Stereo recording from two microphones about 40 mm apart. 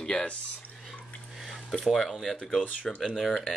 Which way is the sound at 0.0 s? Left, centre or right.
Left.